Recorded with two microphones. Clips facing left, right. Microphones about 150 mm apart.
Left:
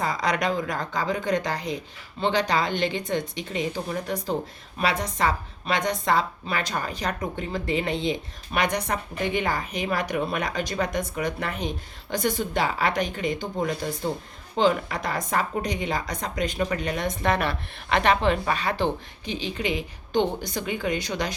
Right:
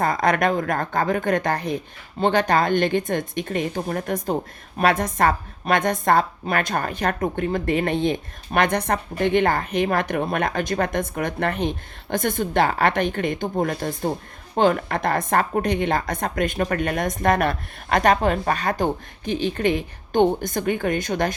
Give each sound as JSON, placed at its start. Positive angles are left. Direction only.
{"t": 0.0, "sound": "a woman's voice", "side_deg": -55}